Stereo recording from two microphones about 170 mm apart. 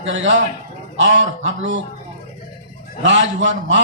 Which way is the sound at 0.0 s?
90° right.